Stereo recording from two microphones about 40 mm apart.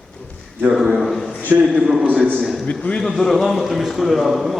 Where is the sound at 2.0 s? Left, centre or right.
Right.